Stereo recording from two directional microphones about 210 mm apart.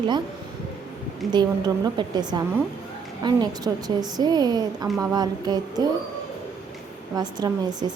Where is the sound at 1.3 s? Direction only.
20° right (ahead or behind).